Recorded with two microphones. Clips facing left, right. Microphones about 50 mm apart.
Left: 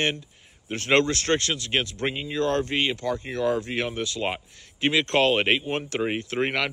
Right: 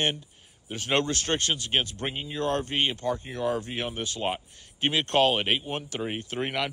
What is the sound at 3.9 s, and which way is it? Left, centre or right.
Speech, right.